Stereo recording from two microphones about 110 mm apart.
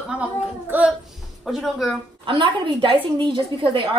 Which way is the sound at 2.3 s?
45° right (ahead or behind).